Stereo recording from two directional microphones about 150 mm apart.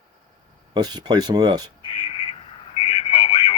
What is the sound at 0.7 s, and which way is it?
Speech, 30° right (ahead or behind).